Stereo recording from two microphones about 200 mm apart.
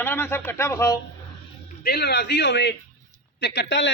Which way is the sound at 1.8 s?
55° left (ahead or behind).